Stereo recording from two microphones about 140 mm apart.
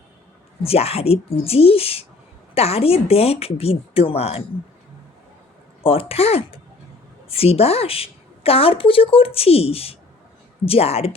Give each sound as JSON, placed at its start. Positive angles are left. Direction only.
{"t": 0.6, "sound": "a woman's voice", "side_deg": 45}
{"t": 5.8, "sound": "a woman's voice", "side_deg": 40}